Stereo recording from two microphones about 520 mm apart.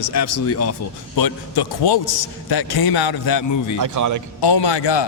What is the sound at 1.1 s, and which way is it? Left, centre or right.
A man's voice, left.